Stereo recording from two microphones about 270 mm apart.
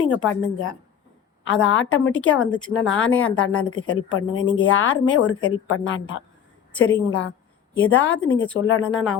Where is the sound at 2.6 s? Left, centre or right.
Centre.